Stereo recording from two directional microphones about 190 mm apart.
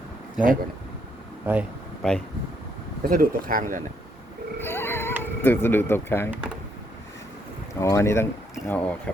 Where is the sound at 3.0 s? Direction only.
50° right (ahead or behind).